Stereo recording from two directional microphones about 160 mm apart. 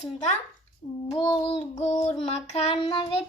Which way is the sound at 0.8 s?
25° left (ahead or behind).